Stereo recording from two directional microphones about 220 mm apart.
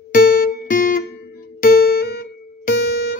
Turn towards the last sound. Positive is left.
turn(degrees=50)  # may be behind; listen again after turning